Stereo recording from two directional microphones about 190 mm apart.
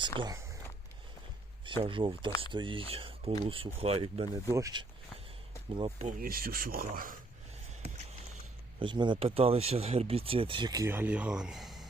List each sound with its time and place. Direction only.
0.2 s speech: 20° right (ahead or behind)
1.8 s speech: 25° right (ahead or behind)
6.1 s speech: 50° right (ahead or behind)
8.8 s speech: 25° right (ahead or behind); by 11.9 s centre (ahead or behind)